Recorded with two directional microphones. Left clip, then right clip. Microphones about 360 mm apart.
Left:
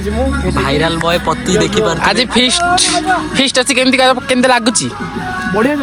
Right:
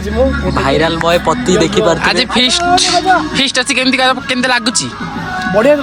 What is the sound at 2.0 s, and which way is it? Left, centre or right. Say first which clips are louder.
Speech: even; centre.